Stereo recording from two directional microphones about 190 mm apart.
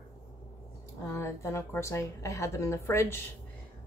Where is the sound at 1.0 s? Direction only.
15° left (ahead or behind).